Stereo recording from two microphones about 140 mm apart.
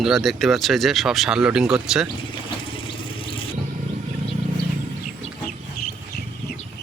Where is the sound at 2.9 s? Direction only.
40° left (ahead or behind).